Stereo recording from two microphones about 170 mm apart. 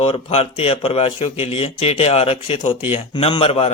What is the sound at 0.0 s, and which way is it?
Speech, 35° left (ahead or behind).